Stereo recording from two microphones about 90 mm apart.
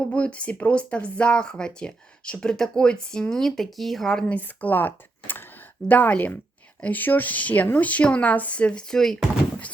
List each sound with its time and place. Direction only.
0.1 s speech: 15° left (ahead or behind)
4.3 s speech: 20° left (ahead or behind)